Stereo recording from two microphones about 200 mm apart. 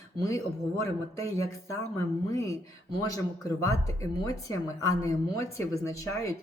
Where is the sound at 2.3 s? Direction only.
15° left (ahead or behind).